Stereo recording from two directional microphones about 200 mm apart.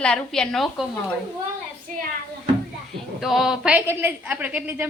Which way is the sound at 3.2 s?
Centre (ahead or behind).